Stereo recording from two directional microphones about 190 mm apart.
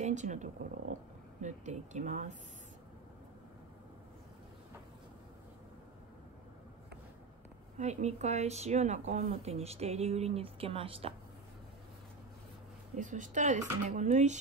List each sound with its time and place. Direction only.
0.0 s speech: 40° right (ahead or behind)
0.9 s a sound: 40° right (ahead or behind)
1.4 s a woman's voice: 40° right (ahead or behind)
7.7 s a woman's voice: 35° right (ahead or behind)
12.9 s a woman's voice: 40° right (ahead or behind)